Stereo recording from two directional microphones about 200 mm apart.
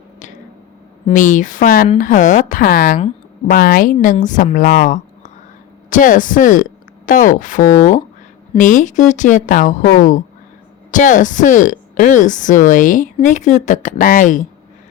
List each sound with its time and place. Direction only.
1.1 s speech: 40° left (ahead or behind)